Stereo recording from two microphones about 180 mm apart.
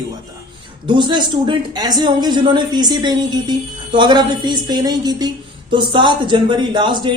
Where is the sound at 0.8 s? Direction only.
25° right (ahead or behind).